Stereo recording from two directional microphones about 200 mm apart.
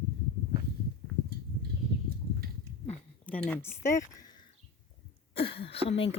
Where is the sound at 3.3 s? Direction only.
5° left (ahead or behind).